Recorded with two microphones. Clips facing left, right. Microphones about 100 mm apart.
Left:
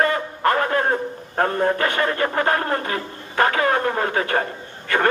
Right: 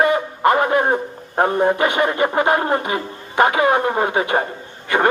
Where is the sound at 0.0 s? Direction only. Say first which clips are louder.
Right 4 dB; 15° right (ahead or behind).